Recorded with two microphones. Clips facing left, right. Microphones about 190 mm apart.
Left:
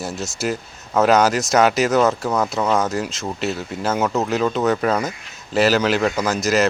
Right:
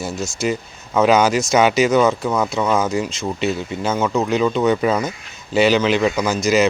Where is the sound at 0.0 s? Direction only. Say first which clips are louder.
Right 2 dB; centre (ahead or behind).